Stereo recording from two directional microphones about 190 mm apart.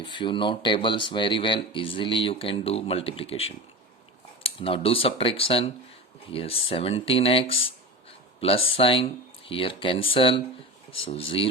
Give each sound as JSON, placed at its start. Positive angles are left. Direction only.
{"t": 0.0, "sound": "speech", "side_deg": 25}